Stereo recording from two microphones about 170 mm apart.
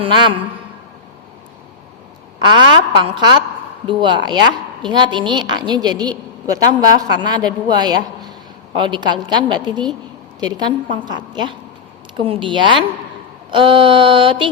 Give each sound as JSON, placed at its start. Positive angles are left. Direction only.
{"t": 0.0, "sound": "a woman's voice", "side_deg": -30}
{"t": 2.4, "sound": "a woman's voice", "side_deg": -25}